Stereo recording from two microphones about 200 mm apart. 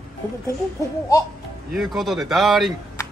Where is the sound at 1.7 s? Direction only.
Centre (ahead or behind).